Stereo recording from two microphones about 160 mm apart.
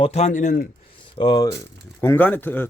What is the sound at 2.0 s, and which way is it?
Speech, 15° left (ahead or behind).